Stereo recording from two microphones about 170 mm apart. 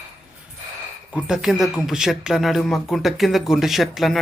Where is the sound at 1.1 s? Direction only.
5° right (ahead or behind).